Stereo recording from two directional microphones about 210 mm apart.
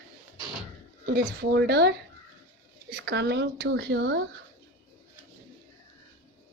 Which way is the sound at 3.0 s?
55° right (ahead or behind).